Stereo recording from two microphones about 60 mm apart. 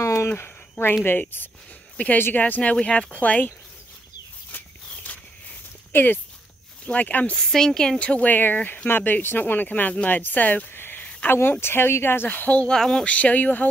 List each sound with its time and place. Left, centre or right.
0.0 s a sound: left
0.3 s a sound: left
2.1 s speech: left
2.4 s speech: left
4.5 s walk: left
5.9 s speech: left
6.9 s speech: left
7.3 s speech: centre
8.0 s speech: left
10.7 s a sound: left
11.2 s speech: left
12.3 s speech: left
12.5 s speech: centre
13.0 s speech: left